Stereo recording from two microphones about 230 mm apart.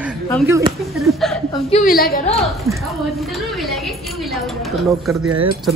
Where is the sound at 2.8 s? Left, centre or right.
Centre.